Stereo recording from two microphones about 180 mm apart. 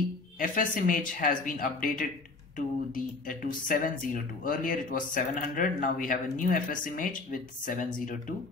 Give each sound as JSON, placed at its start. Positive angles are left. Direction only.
{"t": 0.4, "sound": "speech", "side_deg": 45}